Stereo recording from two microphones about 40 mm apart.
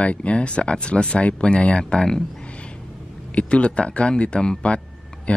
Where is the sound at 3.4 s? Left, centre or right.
Left.